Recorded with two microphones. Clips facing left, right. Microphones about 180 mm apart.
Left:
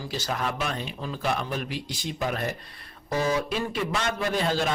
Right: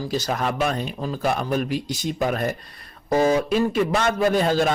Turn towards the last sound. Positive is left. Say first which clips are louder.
# right 7 dB
turn(degrees=-45)  # may be behind; listen again after turning